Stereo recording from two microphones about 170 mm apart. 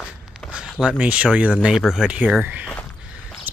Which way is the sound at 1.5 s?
Centre (ahead or behind).